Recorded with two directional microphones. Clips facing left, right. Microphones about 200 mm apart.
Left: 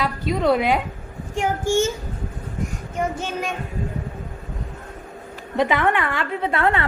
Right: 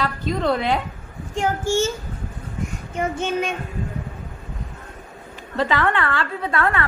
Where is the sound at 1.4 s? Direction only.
15° left (ahead or behind).